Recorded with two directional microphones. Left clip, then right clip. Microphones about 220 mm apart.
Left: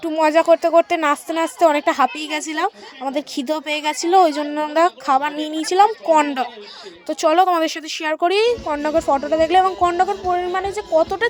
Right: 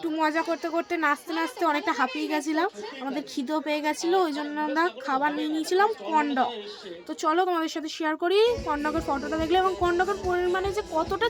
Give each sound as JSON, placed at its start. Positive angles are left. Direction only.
{"t": 0.1, "sound": "a woman's voice", "side_deg": 35}